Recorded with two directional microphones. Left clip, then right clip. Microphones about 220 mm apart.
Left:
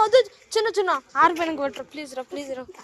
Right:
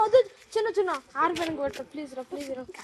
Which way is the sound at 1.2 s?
20° left (ahead or behind).